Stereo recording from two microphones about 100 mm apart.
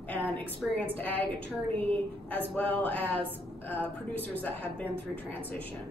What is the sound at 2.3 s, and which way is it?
Speech, 15° left (ahead or behind).